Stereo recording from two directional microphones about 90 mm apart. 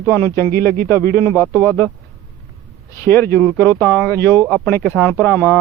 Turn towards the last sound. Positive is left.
turn(degrees=20)  # may be behind; listen again after turning